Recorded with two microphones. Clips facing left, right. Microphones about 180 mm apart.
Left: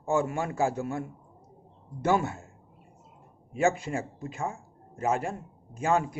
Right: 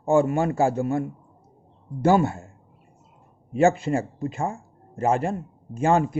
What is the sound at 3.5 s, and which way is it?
A man's voice, 25° right (ahead or behind).